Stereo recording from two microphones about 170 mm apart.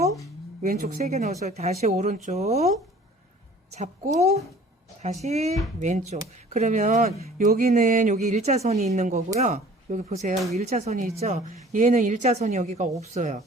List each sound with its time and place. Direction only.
0.6 s a woman's voice: 50° right (ahead or behind)
1.0 s speech: 40° right (ahead or behind)
3.8 s a woman's voice: 40° right (ahead or behind)